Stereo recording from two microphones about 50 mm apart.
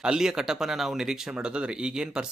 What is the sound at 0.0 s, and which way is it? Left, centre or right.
Speech, centre.